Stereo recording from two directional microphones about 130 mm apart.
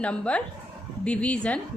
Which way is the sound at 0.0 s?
10° left (ahead or behind).